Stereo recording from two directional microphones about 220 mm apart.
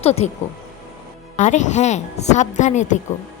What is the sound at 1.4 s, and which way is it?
A woman's voice, 35° left (ahead or behind).